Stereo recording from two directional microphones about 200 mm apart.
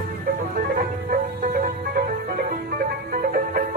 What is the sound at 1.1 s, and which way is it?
Music, 45° right (ahead or behind).